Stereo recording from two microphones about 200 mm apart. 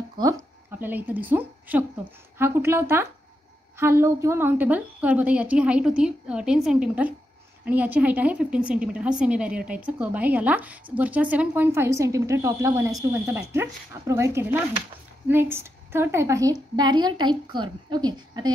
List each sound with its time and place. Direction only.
0.7 s a woman's voice: 10° right (ahead or behind)